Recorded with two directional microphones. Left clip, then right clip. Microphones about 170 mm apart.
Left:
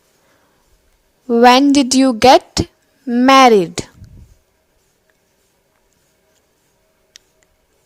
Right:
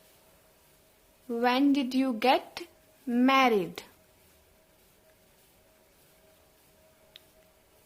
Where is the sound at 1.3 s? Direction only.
60° left (ahead or behind).